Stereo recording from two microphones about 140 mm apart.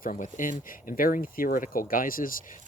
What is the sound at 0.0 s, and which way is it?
Speech, 70° left (ahead or behind).